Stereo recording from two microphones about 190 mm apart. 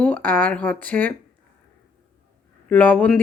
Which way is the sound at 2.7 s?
5° left (ahead or behind).